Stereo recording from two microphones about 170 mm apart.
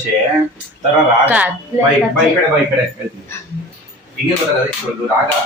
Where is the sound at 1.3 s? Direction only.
10° right (ahead or behind).